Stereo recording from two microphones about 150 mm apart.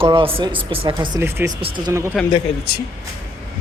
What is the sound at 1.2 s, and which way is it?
Speech, 15° right (ahead or behind).